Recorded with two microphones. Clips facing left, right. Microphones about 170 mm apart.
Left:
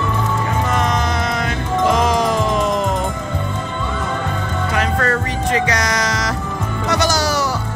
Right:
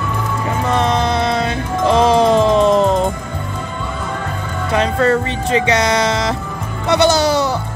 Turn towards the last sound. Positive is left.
turn(degrees=-25)  # may be behind; listen again after turning